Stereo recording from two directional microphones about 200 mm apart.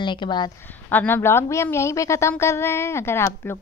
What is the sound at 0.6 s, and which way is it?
A woman's voice, 10° left (ahead or behind).